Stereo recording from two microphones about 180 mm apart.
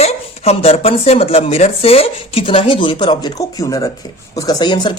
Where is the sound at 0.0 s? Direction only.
35° left (ahead or behind).